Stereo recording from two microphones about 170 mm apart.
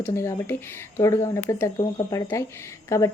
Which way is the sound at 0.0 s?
15° left (ahead or behind).